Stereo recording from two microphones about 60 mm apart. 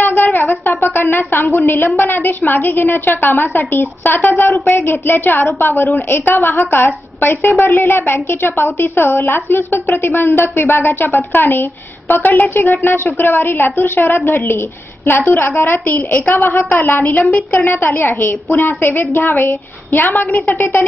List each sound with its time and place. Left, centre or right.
0.0 s a woman's voice: left
17.6 s a woman's voice: left
20.5 s speech: left